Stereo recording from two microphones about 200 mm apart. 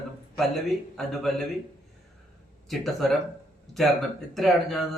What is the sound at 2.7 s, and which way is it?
Speech, centre (ahead or behind).